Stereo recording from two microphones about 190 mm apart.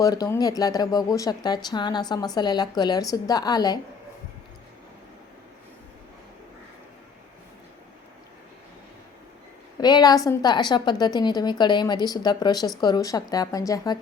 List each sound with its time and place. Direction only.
0.0 s speech: 20° left (ahead or behind)
9.8 s speech: 20° left (ahead or behind)